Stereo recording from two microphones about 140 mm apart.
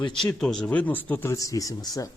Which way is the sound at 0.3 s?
5° left (ahead or behind).